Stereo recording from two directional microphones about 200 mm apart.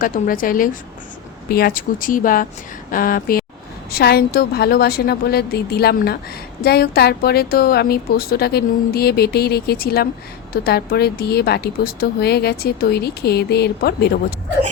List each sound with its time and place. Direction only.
0.0 s speech: 45° left (ahead or behind)